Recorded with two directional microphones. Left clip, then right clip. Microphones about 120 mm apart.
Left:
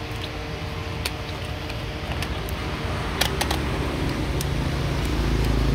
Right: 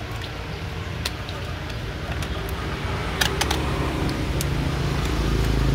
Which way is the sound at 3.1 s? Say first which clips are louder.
Right 2 dB; 30° left (ahead or behind).